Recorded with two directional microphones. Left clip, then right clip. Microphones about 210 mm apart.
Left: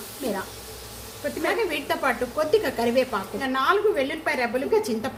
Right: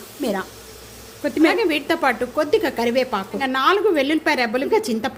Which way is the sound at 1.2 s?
50° right (ahead or behind).